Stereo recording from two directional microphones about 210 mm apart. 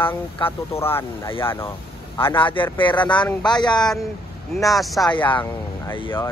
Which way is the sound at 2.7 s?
20° left (ahead or behind).